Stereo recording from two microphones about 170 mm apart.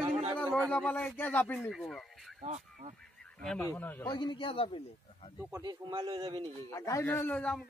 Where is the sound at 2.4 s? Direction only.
45° right (ahead or behind).